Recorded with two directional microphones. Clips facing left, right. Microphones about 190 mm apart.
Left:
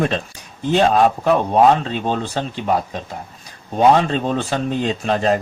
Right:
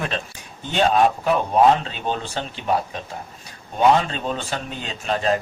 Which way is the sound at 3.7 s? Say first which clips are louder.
Left 4 dB; 35° left (ahead or behind).